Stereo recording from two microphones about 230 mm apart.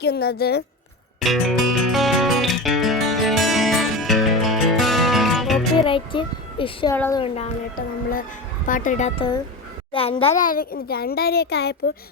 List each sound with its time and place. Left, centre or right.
0.0 s a woman's voice: left
1.2 s music: centre
5.8 s a sound: left
6.9 s speech: centre
8.6 s a child's voice: left